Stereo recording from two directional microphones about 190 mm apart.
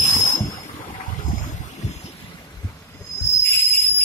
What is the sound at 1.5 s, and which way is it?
Boat, 40° left (ahead or behind).